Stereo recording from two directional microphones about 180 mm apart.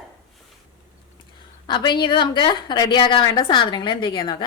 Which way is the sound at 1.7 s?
25° left (ahead or behind).